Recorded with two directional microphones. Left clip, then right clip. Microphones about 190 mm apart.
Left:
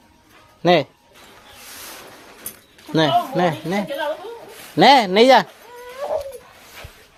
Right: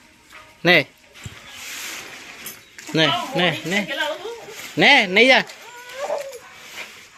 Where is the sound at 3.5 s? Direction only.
Centre (ahead or behind).